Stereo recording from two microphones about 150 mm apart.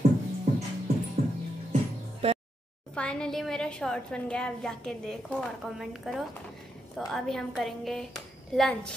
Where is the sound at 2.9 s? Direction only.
5° left (ahead or behind).